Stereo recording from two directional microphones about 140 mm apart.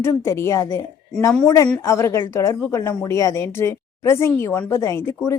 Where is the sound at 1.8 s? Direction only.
20° left (ahead or behind).